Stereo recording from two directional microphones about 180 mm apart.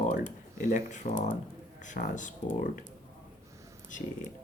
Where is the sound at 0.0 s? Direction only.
45° left (ahead or behind).